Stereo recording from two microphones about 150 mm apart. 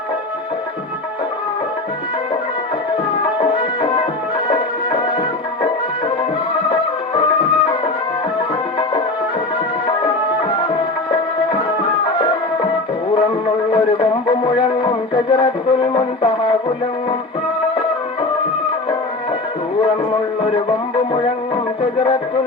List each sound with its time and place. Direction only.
3.4 s music: 35° left (ahead or behind)
6.7 s music: 35° left (ahead or behind)
13.7 s music: 30° left (ahead or behind)
20.4 s music: 35° left (ahead or behind)